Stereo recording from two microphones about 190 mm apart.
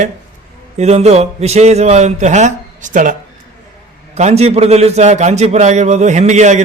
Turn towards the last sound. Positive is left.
turn(degrees=-40)  # may be behind; listen again after turning